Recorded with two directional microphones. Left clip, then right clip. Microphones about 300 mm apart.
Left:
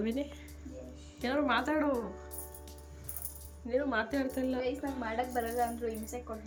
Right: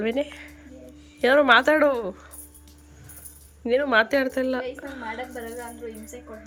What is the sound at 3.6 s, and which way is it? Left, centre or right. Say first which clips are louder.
Speech: right 12 dB; right.